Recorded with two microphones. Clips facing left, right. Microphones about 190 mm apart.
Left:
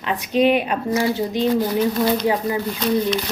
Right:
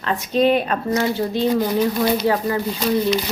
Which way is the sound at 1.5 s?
15° right (ahead or behind).